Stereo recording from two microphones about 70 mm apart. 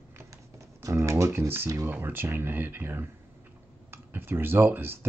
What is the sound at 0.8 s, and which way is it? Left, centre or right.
Typewriter, right.